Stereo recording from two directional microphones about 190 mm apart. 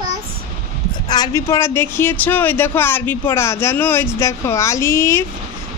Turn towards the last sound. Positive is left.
turn(degrees=15)  # may be behind; listen again after turning